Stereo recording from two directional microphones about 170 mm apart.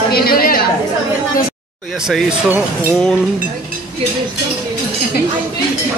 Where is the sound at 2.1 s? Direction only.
5° right (ahead or behind).